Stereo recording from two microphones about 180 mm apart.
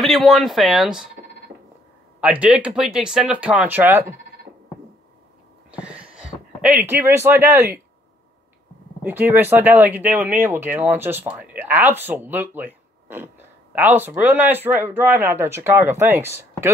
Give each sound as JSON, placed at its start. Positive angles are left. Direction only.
{"t": 0.0, "sound": "speech", "side_deg": 0}
{"t": 2.4, "sound": "speech", "side_deg": -5}
{"t": 5.7, "sound": "a sound", "side_deg": -5}
{"t": 9.0, "sound": "speech", "side_deg": -10}